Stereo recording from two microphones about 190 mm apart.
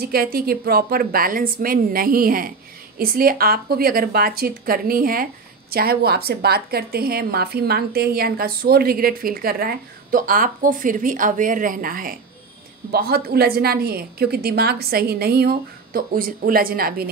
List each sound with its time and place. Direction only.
0.0 s a woman's voice: 50° right (ahead or behind)